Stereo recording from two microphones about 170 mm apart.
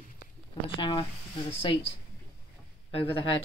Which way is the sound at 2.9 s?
35° left (ahead or behind).